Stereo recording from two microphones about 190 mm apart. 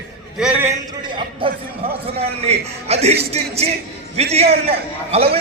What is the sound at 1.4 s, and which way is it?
A man's voice, 25° right (ahead or behind).